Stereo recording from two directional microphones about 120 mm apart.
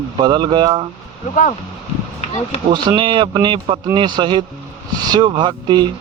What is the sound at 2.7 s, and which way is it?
Speech, 40° right (ahead or behind).